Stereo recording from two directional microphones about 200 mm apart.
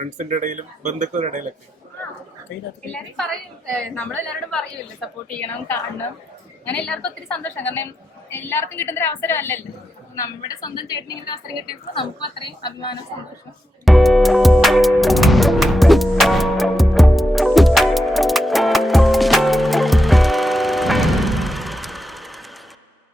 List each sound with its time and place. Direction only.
0.0 s speech: 40° right (ahead or behind)
2.9 s a woman's voice: 5° left (ahead or behind); by 11.3 s 20° left (ahead or behind)
12.5 s speech: 20° left (ahead or behind)
13.8 s music: centre (ahead or behind)